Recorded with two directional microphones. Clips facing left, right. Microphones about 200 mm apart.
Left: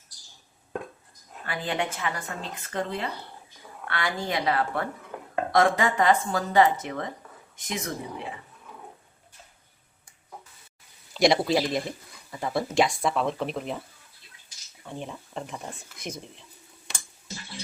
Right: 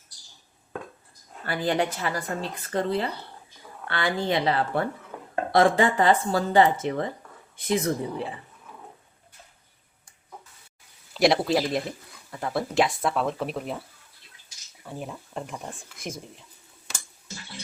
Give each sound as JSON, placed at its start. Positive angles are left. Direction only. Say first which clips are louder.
{"t": 1.5, "sound": "a woman's voice", "louder": "right 4 dB", "side_deg": -40}
{"t": 11.1, "sound": "speech", "louder": "even", "side_deg": 0}
{"t": 14.8, "sound": "speech", "louder": "right 1 dB", "side_deg": -5}